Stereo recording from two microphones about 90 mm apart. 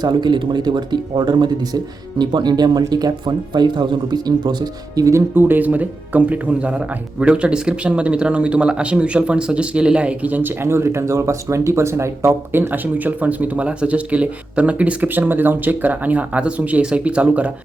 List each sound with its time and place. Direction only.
0.0 s speech: 55° right (ahead or behind)
5.3 s speech: 25° right (ahead or behind)